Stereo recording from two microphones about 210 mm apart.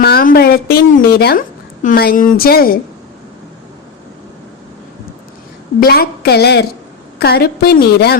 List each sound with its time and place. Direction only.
0.0 s a woman's voice: 45° left (ahead or behind)
5.8 s a woman's voice: 45° left (ahead or behind)